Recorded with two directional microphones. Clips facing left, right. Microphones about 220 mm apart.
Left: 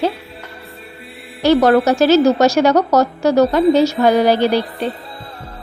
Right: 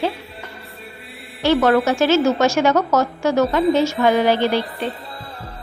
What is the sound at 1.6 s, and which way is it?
Music, 40° left (ahead or behind).